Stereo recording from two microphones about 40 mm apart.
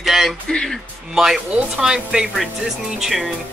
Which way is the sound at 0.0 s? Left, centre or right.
Centre.